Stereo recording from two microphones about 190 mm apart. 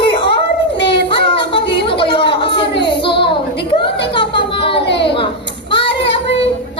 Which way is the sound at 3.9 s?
65° left (ahead or behind).